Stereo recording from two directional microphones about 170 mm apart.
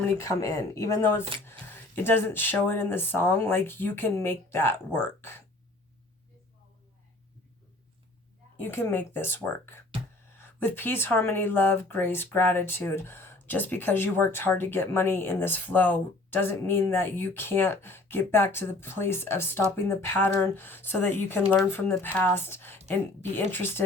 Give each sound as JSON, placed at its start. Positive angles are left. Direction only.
{"t": 0.2, "sound": "speech", "side_deg": 20}
{"t": 8.6, "sound": "speech", "side_deg": 15}